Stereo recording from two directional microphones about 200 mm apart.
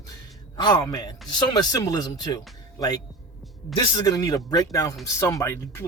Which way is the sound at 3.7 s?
20° left (ahead or behind).